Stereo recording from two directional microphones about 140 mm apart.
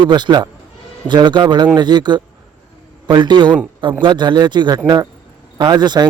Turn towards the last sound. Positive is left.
turn(degrees=-30)  # may be behind; listen again after turning